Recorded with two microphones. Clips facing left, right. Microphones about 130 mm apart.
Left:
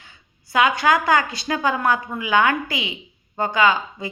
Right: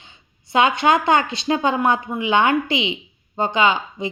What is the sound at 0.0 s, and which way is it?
A woman's voice, 25° right (ahead or behind).